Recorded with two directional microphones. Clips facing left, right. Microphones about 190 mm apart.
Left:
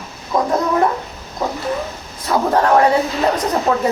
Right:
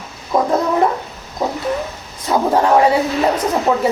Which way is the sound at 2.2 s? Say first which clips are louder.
Right 1 dB; 15° right (ahead or behind).